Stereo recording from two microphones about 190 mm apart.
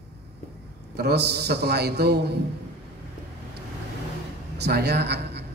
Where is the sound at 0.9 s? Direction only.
60° right (ahead or behind).